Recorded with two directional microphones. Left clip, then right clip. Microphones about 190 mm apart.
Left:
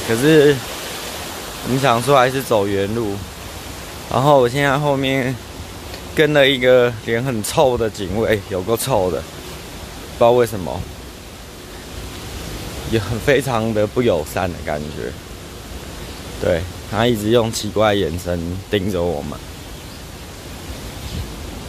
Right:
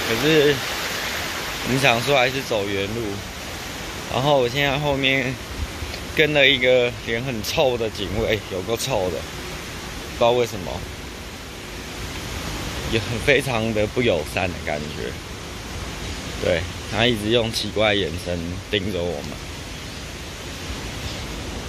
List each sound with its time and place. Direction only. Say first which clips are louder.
0.3 s speech: left 5 dB; 30° left (ahead or behind)
1.8 s speech: left 4 dB; 30° left (ahead or behind)
4.1 s speech: left 6 dB; 35° left (ahead or behind)
10.1 s speech: left 5 dB; 40° left (ahead or behind)
12.9 s speech: left 3 dB; 30° left (ahead or behind)
16.4 s speech: left 3 dB; 20° left (ahead or behind)